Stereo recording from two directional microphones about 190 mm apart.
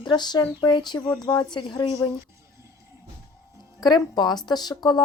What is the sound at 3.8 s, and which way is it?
Speech, 20° left (ahead or behind).